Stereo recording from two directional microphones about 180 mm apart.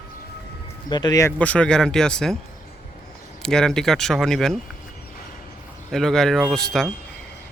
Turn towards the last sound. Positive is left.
turn(degrees=0)  # may be behind; listen again after turning